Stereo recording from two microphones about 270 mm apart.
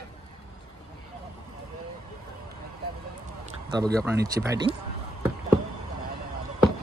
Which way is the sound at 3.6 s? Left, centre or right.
Centre.